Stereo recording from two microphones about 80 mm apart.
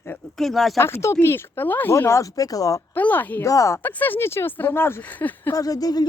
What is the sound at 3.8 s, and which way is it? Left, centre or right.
Speech, left.